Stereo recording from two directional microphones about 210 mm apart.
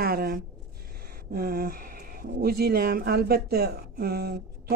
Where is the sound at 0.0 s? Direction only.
45° right (ahead or behind).